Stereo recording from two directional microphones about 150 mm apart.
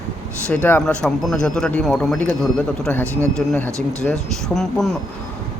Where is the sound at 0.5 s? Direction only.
10° left (ahead or behind).